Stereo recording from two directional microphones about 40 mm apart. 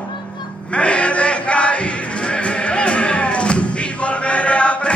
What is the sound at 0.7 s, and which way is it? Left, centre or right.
Music, left.